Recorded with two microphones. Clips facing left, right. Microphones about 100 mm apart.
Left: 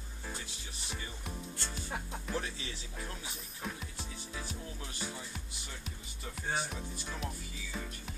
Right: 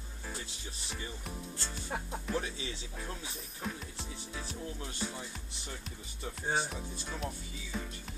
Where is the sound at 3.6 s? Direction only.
Centre (ahead or behind).